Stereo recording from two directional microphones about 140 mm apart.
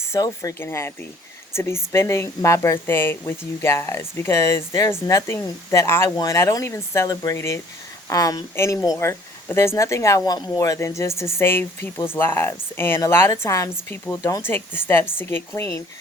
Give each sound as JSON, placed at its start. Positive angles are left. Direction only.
{"t": 0.1, "sound": "speech", "side_deg": 20}